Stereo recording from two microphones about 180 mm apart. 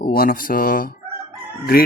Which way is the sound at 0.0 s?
55° left (ahead or behind).